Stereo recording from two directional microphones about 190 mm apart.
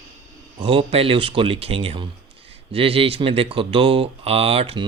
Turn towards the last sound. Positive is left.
turn(degrees=-30)  # may be behind; listen again after turning